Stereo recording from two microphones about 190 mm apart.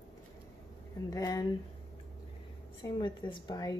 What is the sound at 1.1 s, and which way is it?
Speech, 20° left (ahead or behind).